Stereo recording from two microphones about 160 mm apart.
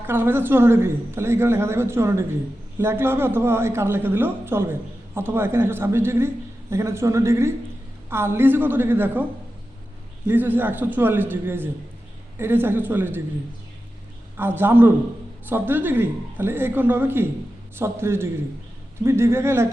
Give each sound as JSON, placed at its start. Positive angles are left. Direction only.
{"t": 0.1, "sound": "speech", "side_deg": -15}
{"t": 10.2, "sound": "speech", "side_deg": -10}
{"t": 14.3, "sound": "speech", "side_deg": -15}